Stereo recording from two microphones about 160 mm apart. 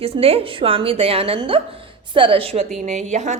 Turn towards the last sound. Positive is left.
turn(degrees=-45)  # may be behind; listen again after turning